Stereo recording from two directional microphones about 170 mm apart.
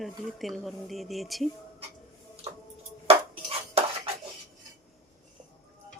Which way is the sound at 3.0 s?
35° right (ahead or behind).